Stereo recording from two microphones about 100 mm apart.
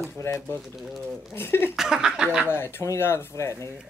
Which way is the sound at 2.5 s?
25° left (ahead or behind).